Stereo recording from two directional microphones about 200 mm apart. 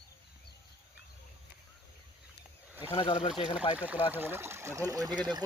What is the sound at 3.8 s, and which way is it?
Speech, 10° right (ahead or behind).